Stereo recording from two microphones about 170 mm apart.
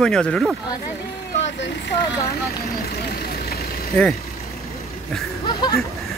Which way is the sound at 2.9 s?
65° left (ahead or behind).